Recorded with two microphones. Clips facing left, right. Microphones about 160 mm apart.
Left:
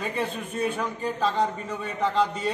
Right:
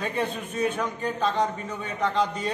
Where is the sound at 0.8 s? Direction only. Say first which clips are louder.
Even; 5° left (ahead or behind).